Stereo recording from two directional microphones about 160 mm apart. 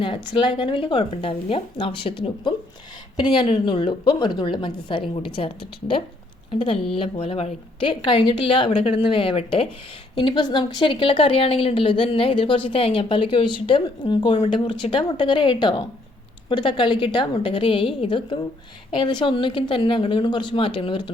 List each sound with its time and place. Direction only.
0.0 s a woman's voice: 30° left (ahead or behind)
6.5 s a woman's voice: 35° left (ahead or behind)